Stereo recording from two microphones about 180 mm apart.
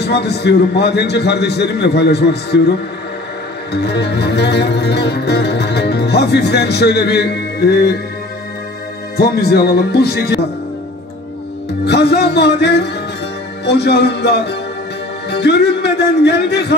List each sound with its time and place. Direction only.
0.0 s music: 65° left (ahead or behind)
3.7 s music: 65° left (ahead or behind)
9.1 s speech: 60° left (ahead or behind)
11.8 s music: 70° left (ahead or behind)